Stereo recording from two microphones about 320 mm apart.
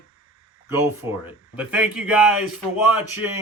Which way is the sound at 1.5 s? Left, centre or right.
Centre.